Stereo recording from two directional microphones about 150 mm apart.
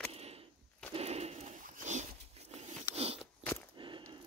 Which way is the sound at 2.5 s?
45° right (ahead or behind).